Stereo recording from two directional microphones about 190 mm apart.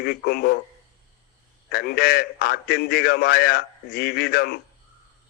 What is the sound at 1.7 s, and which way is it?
A man's voice, 55° left (ahead or behind).